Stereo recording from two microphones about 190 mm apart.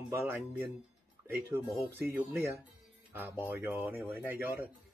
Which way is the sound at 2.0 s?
15° right (ahead or behind).